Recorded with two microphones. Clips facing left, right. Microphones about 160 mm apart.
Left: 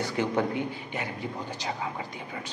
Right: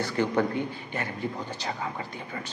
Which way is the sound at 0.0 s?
15° left (ahead or behind).